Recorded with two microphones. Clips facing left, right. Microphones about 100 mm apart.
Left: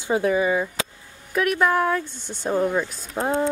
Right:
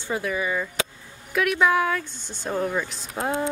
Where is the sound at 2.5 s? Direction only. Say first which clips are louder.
Left 4 dB; 15° left (ahead or behind).